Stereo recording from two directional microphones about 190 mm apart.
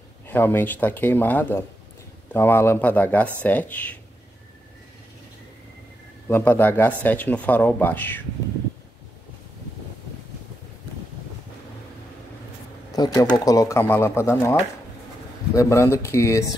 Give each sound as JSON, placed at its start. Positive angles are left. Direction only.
{"t": 0.3, "sound": "speech", "side_deg": 10}
{"t": 6.2, "sound": "speech", "side_deg": 10}
{"t": 12.9, "sound": "speech", "side_deg": 20}